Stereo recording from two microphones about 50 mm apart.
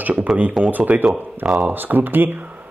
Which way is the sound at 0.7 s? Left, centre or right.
Right.